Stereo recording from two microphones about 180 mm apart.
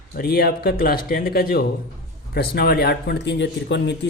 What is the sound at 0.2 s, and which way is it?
Speech, 60° left (ahead or behind).